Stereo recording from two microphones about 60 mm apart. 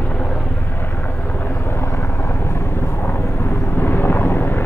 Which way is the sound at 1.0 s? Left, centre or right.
Left.